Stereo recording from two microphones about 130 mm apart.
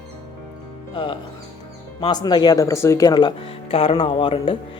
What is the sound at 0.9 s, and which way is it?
Speech, 40° left (ahead or behind).